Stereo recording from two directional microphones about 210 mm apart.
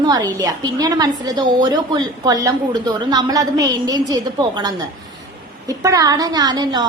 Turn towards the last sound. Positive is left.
turn(degrees=-20)  # may be behind; listen again after turning